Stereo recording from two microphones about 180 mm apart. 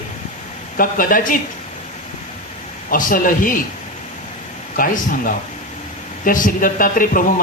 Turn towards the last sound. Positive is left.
turn(degrees=50)  # may be behind; listen again after turning